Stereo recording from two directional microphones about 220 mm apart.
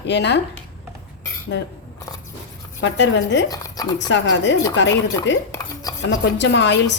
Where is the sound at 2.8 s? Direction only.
55° left (ahead or behind).